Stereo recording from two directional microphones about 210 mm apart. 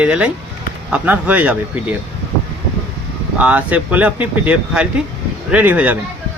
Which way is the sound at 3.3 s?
5° right (ahead or behind).